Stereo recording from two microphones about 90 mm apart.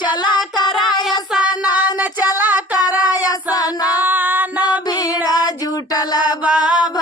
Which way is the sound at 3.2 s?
45° left (ahead or behind).